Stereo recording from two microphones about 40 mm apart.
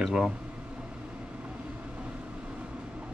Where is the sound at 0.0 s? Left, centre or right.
Right.